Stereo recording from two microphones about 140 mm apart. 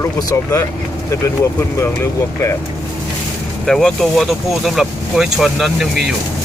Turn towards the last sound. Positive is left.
turn(degrees=0)  # may be behind; listen again after turning